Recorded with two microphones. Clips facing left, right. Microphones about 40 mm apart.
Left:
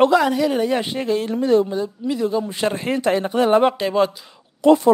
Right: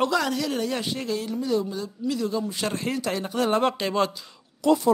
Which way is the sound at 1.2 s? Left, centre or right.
Left.